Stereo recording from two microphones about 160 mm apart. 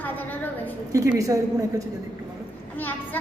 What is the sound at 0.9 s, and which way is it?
Speech, 20° right (ahead or behind).